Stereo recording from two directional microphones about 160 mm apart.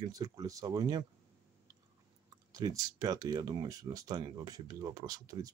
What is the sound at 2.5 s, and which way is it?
Speech, 25° right (ahead or behind).